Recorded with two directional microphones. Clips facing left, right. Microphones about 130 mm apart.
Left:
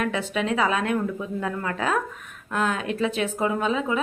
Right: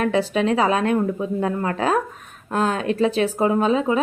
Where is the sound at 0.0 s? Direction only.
35° right (ahead or behind).